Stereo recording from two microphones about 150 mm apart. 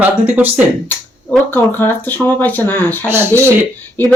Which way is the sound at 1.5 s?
15° left (ahead or behind).